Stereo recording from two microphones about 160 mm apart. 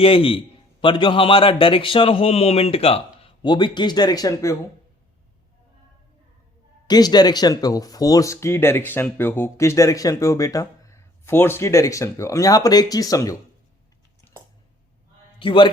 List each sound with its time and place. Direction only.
0.0 s a man's voice: 35° left (ahead or behind)
6.8 s speech: 25° left (ahead or behind)
15.4 s a man's voice: 30° left (ahead or behind)